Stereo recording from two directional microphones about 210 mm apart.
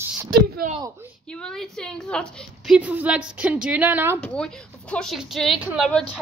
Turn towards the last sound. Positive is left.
turn(degrees=0)  # may be behind; listen again after turning